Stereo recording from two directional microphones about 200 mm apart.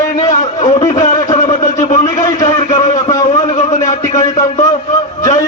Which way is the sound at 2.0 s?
15° left (ahead or behind).